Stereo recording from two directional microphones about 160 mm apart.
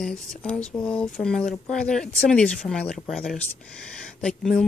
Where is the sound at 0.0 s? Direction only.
5° left (ahead or behind).